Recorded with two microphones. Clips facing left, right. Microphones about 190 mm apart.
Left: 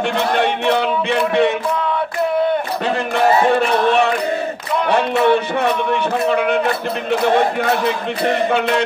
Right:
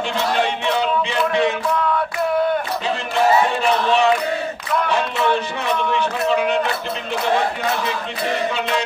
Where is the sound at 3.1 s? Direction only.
60° left (ahead or behind).